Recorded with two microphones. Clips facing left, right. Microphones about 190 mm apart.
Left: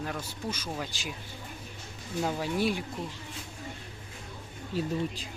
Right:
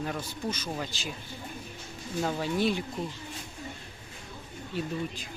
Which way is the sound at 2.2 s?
10° left (ahead or behind).